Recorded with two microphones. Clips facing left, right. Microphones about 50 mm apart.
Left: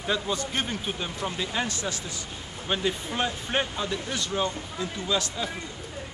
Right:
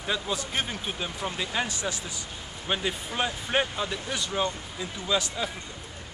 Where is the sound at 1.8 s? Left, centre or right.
Centre.